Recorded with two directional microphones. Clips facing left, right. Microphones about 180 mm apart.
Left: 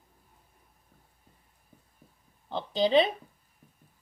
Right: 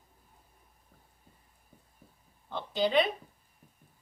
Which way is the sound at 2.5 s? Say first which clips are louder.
Left 4 dB; 25° left (ahead or behind).